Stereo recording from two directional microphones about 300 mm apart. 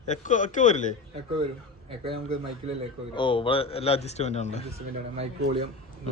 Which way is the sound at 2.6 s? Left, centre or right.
Right.